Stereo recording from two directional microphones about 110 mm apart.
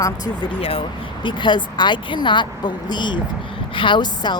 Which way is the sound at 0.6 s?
55° left (ahead or behind).